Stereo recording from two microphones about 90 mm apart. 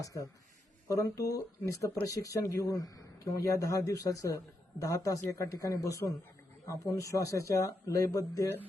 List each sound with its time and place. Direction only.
0.0 s speech: 40° left (ahead or behind)